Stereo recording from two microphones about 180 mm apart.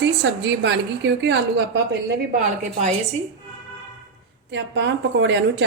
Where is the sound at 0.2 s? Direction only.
85° right.